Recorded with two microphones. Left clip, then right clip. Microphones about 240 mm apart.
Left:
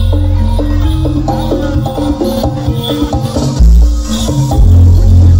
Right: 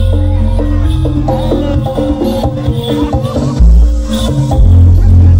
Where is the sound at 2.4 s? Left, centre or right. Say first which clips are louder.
Even; left.